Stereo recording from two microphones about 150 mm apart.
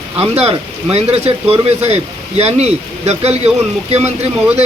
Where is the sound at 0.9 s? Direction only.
40° right (ahead or behind).